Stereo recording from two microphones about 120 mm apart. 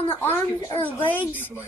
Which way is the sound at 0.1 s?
20° left (ahead or behind).